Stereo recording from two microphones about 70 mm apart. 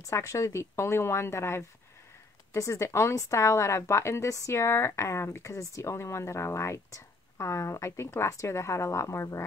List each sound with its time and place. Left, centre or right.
0.0 s a woman's voice: left